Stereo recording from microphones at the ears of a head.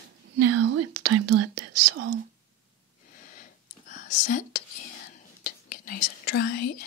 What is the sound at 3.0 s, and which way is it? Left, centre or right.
Whispering, left.